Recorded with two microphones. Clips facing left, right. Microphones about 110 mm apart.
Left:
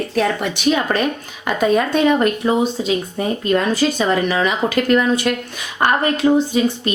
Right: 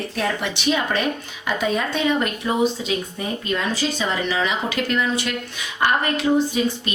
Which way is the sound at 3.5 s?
50° left (ahead or behind).